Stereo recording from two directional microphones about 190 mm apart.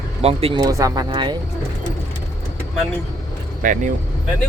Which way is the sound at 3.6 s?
45° right (ahead or behind).